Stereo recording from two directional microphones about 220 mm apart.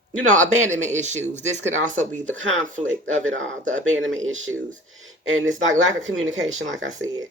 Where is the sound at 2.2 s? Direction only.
60° right (ahead or behind).